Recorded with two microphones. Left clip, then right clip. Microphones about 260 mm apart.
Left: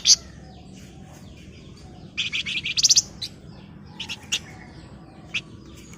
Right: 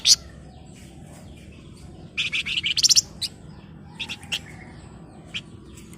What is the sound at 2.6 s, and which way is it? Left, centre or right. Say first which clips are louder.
Bird: even; left.